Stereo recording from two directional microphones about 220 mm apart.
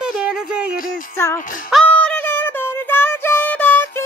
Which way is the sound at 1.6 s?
Centre (ahead or behind).